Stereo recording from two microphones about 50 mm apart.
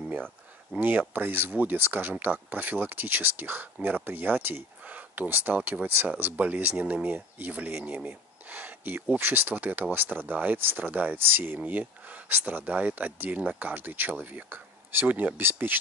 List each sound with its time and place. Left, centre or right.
0.7 s speech: right
4.8 s a sound: right
5.3 s speech: right